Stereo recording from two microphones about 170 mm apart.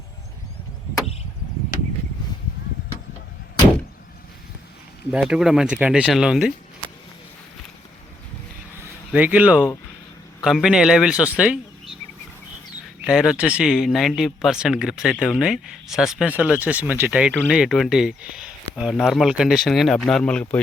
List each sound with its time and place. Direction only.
5.1 s speech: 5° right (ahead or behind)
8.8 s speech: 10° right (ahead or behind)
13.1 s speech: 5° right (ahead or behind)